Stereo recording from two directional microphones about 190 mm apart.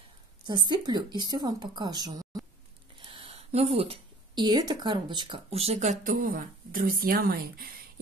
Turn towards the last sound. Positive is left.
turn(degrees=-50)  # may be behind; listen again after turning